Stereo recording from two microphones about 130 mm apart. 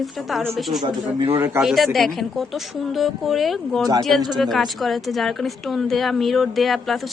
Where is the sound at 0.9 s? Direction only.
35° right (ahead or behind).